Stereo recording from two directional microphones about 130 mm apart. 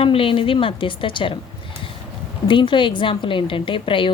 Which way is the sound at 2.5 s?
40° left (ahead or behind).